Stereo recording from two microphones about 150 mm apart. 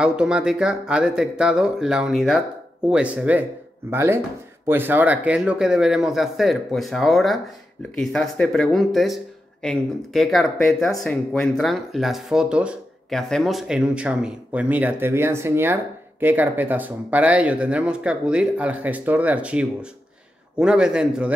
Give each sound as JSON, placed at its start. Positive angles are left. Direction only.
{"t": 0.0, "sound": "speech", "side_deg": -5}